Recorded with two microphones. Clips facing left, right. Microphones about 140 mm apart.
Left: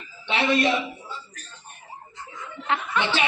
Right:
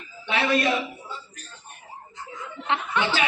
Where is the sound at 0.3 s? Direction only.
25° left (ahead or behind).